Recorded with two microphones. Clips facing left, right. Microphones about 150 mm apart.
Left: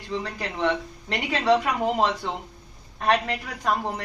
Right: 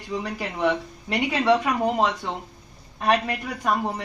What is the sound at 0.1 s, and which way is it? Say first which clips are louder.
A woman's voice: right 1 dB; 10° right (ahead or behind).